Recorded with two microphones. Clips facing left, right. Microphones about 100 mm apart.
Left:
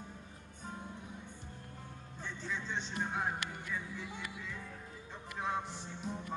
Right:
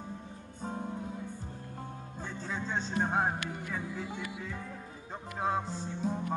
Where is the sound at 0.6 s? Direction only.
35° right (ahead or behind).